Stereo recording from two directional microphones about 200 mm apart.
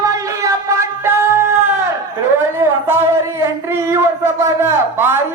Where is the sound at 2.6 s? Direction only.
10° right (ahead or behind).